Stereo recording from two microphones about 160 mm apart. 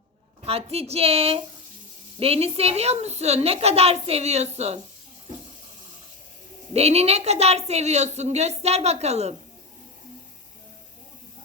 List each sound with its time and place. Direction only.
0.4 s a woman's voice: 40° right (ahead or behind)
6.7 s a woman's voice: 40° right (ahead or behind)